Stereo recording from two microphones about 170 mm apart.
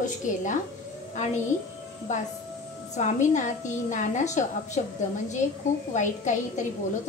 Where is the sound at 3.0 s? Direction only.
45° left (ahead or behind).